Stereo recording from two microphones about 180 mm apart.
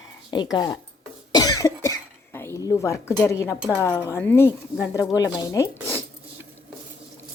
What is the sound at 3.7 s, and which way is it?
Speech, 15° left (ahead or behind).